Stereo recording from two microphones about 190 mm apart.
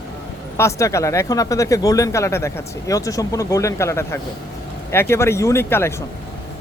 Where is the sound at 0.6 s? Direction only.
15° left (ahead or behind).